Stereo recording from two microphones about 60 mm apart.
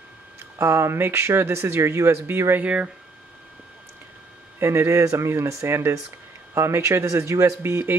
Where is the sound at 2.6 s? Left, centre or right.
Right.